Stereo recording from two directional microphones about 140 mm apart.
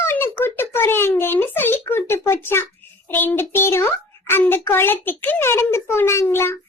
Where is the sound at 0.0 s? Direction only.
15° left (ahead or behind).